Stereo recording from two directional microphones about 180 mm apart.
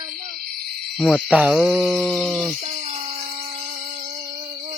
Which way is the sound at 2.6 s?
35° right (ahead or behind).